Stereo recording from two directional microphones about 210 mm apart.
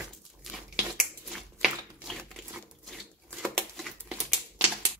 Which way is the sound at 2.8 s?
Centre (ahead or behind).